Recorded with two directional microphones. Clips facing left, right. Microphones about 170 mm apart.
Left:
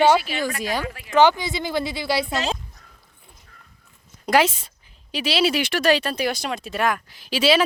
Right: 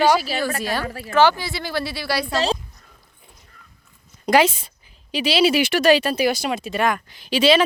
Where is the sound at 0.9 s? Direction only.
35° right (ahead or behind).